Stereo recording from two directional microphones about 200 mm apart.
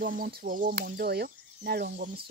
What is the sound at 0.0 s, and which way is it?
Speech, 40° right (ahead or behind).